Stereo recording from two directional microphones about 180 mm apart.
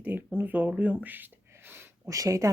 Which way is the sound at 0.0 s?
10° right (ahead or behind).